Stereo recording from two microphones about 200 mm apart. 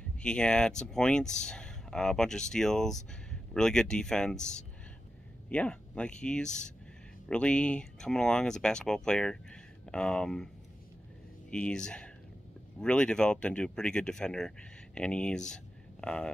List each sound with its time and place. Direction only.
0.2 s speech: 5° left (ahead or behind)
11.5 s speech: 5° left (ahead or behind)